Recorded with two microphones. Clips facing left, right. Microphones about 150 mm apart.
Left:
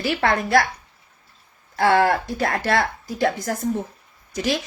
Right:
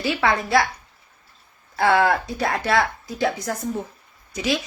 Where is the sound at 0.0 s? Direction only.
55° left (ahead or behind).